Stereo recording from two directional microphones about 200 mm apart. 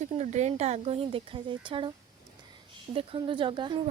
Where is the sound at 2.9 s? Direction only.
25° right (ahead or behind).